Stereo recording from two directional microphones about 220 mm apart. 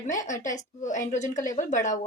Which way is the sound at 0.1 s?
35° left (ahead or behind).